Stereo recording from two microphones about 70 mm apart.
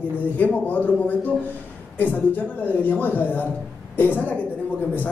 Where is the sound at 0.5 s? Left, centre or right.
Left.